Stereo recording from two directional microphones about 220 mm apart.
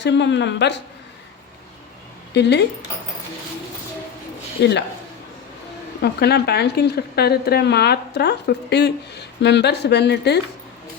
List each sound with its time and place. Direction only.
0.0 s a woman's voice: 50° left (ahead or behind)
2.3 s a woman's voice: 50° left (ahead or behind)
4.6 s a woman's voice: 50° left (ahead or behind)
6.0 s a woman's voice: 45° left (ahead or behind)